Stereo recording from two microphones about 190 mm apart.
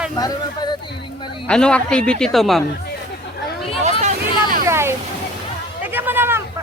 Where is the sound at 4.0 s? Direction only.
40° right (ahead or behind).